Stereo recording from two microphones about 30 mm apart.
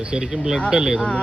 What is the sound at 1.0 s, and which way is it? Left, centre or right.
Speech, left.